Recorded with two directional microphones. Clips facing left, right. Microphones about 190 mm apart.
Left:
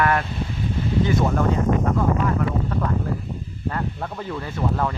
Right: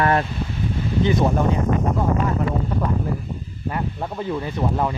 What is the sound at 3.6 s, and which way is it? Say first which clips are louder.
Speech: right 1 dB; 15° right (ahead or behind).